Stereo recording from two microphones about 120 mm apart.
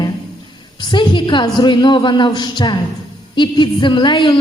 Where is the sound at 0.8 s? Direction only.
40° left (ahead or behind).